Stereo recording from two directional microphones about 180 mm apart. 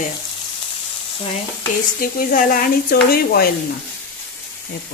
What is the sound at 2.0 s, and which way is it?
Speech, 50° left (ahead or behind).